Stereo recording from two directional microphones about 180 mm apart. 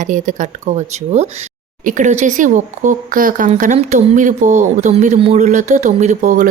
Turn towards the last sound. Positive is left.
turn(degrees=-45)  # may be behind; listen again after turning